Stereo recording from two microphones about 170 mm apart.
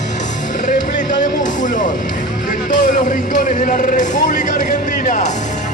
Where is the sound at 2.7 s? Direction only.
50° left (ahead or behind).